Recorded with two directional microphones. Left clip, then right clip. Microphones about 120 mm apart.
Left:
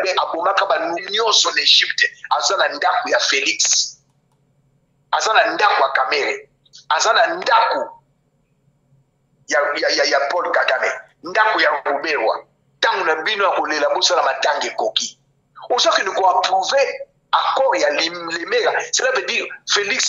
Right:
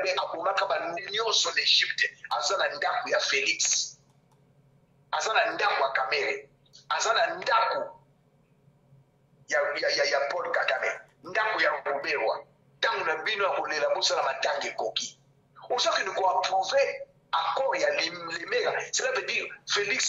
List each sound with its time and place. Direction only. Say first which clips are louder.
0.0 s speech: left 10 dB; 45° left (ahead or behind)
5.1 s speech: left 10 dB; 45° left (ahead or behind)
9.5 s speech: left 9 dB; 45° left (ahead or behind)